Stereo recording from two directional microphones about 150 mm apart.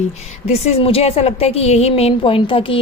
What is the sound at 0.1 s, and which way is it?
A woman's voice, 45° left (ahead or behind).